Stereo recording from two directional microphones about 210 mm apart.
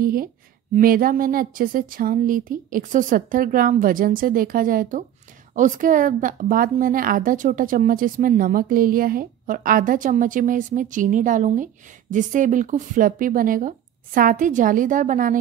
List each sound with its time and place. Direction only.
0.0 s speech: 45° right (ahead or behind)